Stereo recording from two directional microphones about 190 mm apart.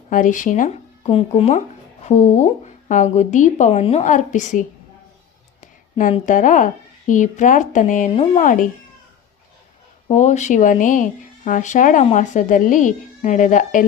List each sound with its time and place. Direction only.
0.1 s a woman's voice: 45° left (ahead or behind)
5.5 s a sound: 45° left (ahead or behind)
6.2 s speech: 45° left (ahead or behind)
8.1 s speech: 30° left (ahead or behind)
10.1 s a woman's voice: 40° left (ahead or behind)